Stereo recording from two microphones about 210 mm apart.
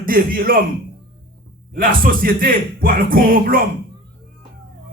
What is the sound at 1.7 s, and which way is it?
Speech, 45° right (ahead or behind).